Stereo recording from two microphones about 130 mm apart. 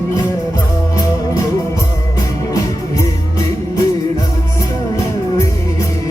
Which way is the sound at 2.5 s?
25° left (ahead or behind).